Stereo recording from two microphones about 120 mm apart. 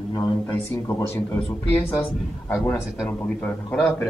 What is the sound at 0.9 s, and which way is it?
Speech, 20° left (ahead or behind).